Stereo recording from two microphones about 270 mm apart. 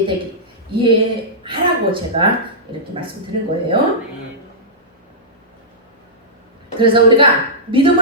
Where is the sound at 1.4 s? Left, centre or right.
Centre.